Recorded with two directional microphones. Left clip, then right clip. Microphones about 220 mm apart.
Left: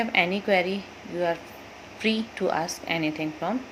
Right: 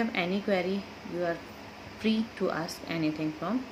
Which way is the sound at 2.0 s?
10° right (ahead or behind).